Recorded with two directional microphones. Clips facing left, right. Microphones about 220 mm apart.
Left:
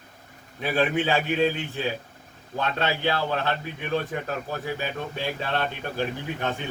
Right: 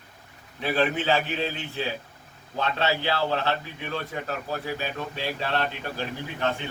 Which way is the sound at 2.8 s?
50° left (ahead or behind).